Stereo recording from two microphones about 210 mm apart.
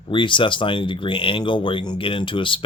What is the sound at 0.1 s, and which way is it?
Speech, 25° left (ahead or behind).